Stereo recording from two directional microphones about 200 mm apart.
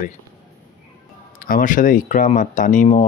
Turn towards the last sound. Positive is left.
turn(degrees=35)  # may be behind; listen again after turning